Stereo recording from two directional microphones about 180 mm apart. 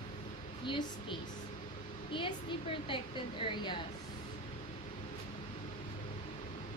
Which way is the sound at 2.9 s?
30° left (ahead or behind).